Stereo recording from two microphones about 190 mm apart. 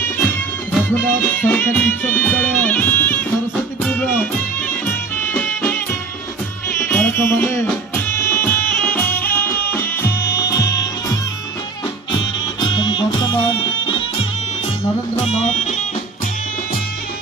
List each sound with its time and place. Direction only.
1.4 s music: 10° left (ahead or behind)
12.2 s music: 25° left (ahead or behind)
15.1 s music: 35° left (ahead or behind)